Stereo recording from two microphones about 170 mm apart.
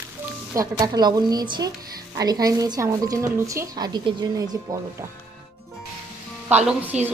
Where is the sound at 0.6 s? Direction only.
25° right (ahead or behind).